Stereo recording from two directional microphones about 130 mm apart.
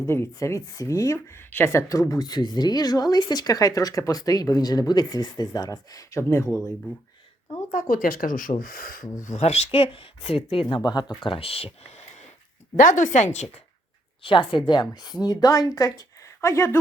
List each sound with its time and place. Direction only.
0.0 s speech: 20° left (ahead or behind)
7.7 s speech: 90° left
9.2 s speech: 60° left (ahead or behind); by 10.8 s 45° left (ahead or behind)
10.8 s speech: 30° left (ahead or behind); by 12.0 s 50° left (ahead or behind)
12.7 s a woman's voice: 80° left; by 13.6 s 60° left (ahead or behind)
14.2 s a woman's voice: 40° left (ahead or behind); by 16.8 s 20° left (ahead or behind)